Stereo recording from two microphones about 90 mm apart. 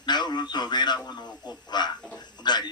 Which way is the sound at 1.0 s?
50° left (ahead or behind).